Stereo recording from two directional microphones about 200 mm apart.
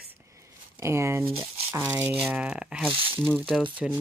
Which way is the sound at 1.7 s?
10° right (ahead or behind).